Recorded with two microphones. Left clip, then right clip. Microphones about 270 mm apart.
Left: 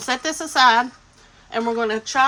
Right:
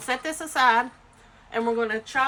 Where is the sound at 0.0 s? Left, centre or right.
Centre.